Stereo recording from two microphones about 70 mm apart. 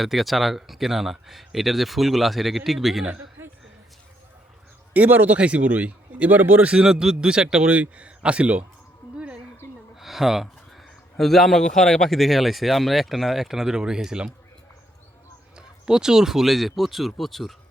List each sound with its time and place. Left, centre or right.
0.0 s speech: centre
4.9 s speech: right
9.1 s a sound: centre
9.9 s speech: centre
15.5 s speech: centre